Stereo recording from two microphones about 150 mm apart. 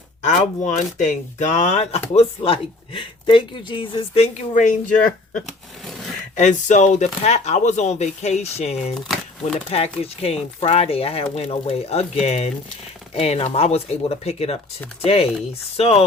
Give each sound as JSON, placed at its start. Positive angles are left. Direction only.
{"t": 0.3, "sound": "speech", "side_deg": 55}
{"t": 4.5, "sound": "speech", "side_deg": 55}
{"t": 5.8, "sound": "a sound", "side_deg": 0}
{"t": 6.3, "sound": "speech", "side_deg": 55}
{"t": 9.0, "sound": "crumpling", "side_deg": 0}
{"t": 9.6, "sound": "speech", "side_deg": 40}